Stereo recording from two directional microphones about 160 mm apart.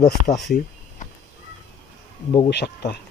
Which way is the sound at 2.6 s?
85° left.